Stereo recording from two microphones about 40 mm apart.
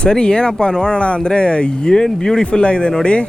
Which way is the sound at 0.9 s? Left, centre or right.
Left.